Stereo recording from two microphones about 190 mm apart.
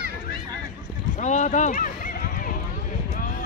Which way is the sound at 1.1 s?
40° left (ahead or behind).